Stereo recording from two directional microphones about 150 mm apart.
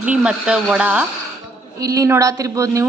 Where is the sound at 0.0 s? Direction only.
5° right (ahead or behind).